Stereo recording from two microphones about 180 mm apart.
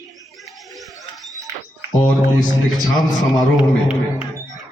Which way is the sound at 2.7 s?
20° left (ahead or behind).